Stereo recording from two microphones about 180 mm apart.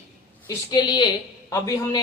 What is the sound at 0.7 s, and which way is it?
Speech, 25° left (ahead or behind).